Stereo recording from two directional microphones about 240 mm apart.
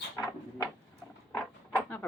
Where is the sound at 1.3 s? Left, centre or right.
Centre.